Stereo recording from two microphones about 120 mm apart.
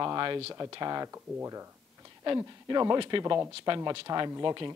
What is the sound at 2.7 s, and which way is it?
Speech, 35° right (ahead or behind).